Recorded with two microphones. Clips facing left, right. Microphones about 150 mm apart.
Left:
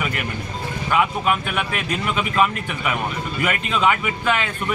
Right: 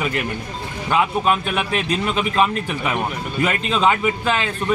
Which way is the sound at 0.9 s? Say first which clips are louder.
Right 2 dB; 25° right (ahead or behind).